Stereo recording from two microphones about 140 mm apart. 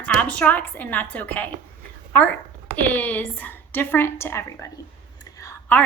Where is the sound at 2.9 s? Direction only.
10° left (ahead or behind).